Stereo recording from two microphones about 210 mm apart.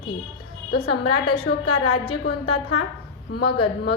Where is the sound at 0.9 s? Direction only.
90° left.